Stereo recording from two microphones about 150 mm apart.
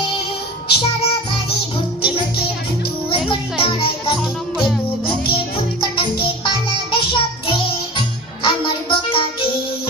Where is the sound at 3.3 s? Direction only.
35° left (ahead or behind).